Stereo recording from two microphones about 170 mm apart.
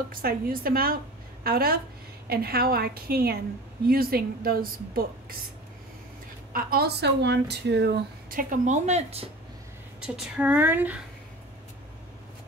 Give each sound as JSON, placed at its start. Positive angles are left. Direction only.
{"t": 0.1, "sound": "speech", "side_deg": -60}
{"t": 6.5, "sound": "speech", "side_deg": -65}
{"t": 9.9, "sound": "speech", "side_deg": -5}